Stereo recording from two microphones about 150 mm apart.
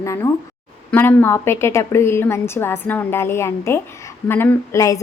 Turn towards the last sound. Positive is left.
turn(degrees=20)  # may be behind; listen again after turning